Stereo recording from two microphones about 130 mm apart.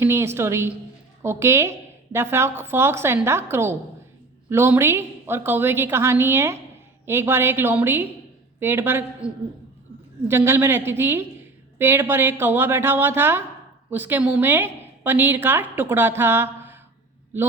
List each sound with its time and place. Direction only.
0.0 s a woman's voice: 20° right (ahead or behind)